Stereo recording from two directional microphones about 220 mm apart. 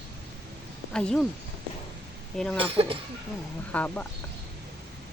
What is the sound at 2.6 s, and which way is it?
Speech, 25° right (ahead or behind).